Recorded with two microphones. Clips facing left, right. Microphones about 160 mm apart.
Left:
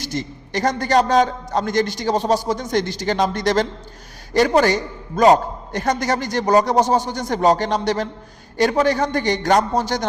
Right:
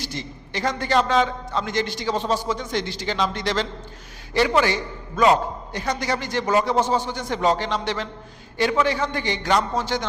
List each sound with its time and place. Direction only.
0.0 s a man's voice: 45° left (ahead or behind)